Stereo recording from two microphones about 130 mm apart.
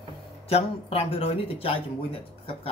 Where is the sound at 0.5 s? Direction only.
50° left (ahead or behind).